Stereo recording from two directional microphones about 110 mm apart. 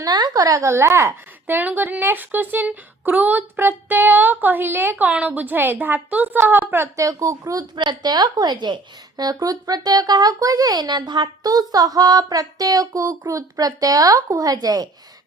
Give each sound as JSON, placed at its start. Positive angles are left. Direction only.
{"t": 0.0, "sound": "a woman's voice", "side_deg": -40}
{"t": 7.8, "sound": "a woman's voice", "side_deg": -40}